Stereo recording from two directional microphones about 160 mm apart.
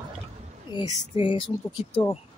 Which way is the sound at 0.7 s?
30° left (ahead or behind).